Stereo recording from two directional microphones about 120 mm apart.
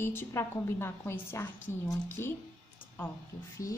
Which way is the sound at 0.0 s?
20° left (ahead or behind).